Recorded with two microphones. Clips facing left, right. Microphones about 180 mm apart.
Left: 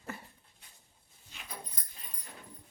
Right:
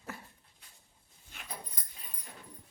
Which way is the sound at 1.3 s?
55° right (ahead or behind).